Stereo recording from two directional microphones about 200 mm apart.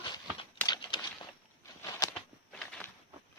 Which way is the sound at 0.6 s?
20° left (ahead or behind).